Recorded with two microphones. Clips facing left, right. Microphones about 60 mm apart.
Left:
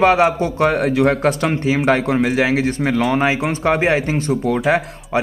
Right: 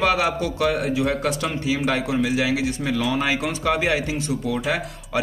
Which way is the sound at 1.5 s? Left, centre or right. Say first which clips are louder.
Left 6 dB; left.